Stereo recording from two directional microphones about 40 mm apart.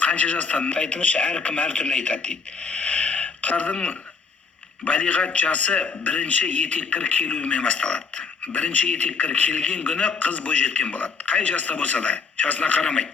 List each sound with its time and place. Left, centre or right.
0.0 s a man's voice: left
4.9 s a man's voice: left